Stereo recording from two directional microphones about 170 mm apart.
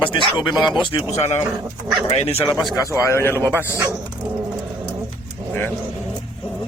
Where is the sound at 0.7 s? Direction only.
30° left (ahead or behind).